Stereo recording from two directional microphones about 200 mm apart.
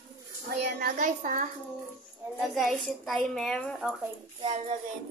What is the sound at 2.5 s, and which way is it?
A child's voice, centre (ahead or behind).